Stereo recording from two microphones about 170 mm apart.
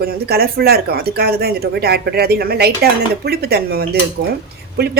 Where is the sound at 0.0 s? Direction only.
65° right (ahead or behind).